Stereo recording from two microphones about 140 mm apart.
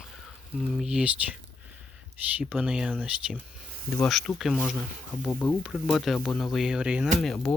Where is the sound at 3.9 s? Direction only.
Centre (ahead or behind).